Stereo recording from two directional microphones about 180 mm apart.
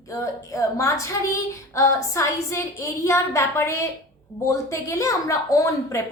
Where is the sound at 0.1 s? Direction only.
15° left (ahead or behind).